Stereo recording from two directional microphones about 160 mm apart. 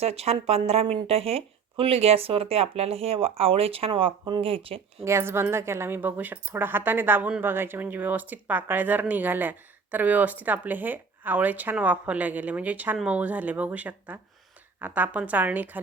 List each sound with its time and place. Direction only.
0.0 s speech: 40° right (ahead or behind)
5.0 s a woman's voice: 15° right (ahead or behind)